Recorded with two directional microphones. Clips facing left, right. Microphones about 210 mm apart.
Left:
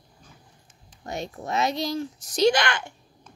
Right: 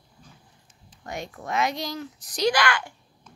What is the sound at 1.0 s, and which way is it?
A woman's voice, 25° left (ahead or behind).